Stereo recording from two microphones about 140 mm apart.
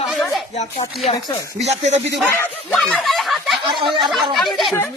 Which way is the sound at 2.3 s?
15° left (ahead or behind).